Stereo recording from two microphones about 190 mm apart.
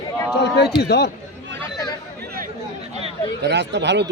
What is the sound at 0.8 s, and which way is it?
Speech, 60° left (ahead or behind).